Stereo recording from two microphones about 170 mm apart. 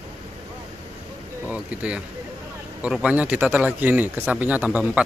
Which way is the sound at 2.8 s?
5° right (ahead or behind).